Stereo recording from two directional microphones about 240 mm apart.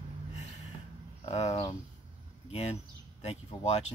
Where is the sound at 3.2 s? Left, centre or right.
Left.